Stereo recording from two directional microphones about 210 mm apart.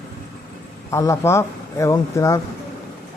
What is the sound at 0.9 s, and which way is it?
Speech, 15° left (ahead or behind).